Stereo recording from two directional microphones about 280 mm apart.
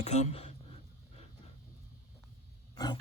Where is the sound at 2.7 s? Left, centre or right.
Centre.